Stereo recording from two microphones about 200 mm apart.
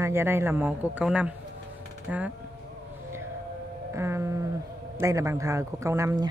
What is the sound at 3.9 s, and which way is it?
Speech, 15° right (ahead or behind).